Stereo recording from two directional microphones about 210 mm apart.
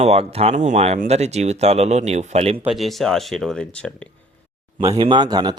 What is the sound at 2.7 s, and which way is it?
Speech, centre (ahead or behind).